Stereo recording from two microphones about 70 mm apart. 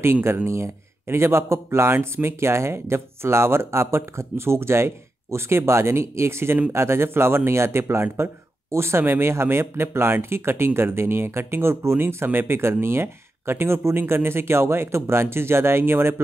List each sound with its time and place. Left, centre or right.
0.0 s speech: right